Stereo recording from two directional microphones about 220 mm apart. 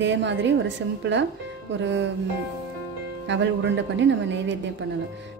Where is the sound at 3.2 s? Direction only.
55° right (ahead or behind).